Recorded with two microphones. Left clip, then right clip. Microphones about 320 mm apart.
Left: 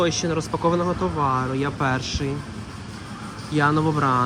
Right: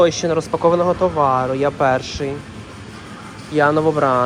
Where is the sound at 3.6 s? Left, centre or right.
Centre.